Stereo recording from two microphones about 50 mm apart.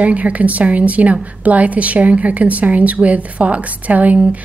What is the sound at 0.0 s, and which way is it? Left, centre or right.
A woman's voice, right.